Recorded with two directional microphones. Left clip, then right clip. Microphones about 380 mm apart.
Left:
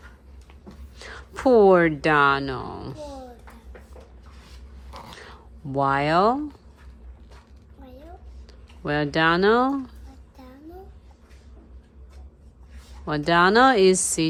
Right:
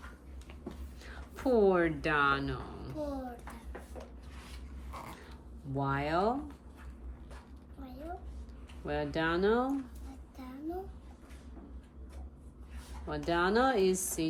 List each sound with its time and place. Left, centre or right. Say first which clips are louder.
0.9 s speech: left 11 dB; centre
5.8 s speech: left 12 dB; centre
8.9 s speech: left 12 dB; centre
13.1 s speech: left 12 dB; centre